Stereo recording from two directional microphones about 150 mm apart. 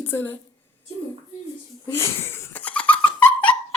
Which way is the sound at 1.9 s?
15° left (ahead or behind).